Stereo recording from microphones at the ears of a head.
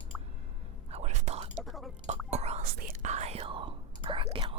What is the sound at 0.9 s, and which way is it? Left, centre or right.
Whispering, right.